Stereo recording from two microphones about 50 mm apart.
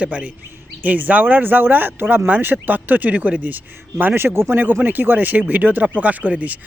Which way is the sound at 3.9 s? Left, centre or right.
Right.